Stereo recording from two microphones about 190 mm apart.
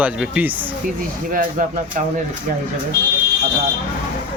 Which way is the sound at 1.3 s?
45° right (ahead or behind).